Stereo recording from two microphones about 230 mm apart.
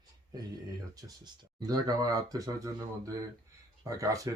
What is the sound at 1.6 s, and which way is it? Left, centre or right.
Speech, centre.